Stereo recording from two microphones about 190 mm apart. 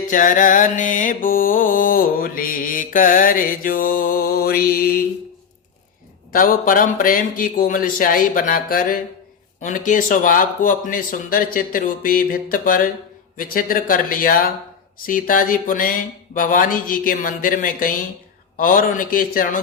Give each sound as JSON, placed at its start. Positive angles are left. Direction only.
{"t": 0.1, "sound": "mantra", "side_deg": 45}
{"t": 6.3, "sound": "mantra", "side_deg": 45}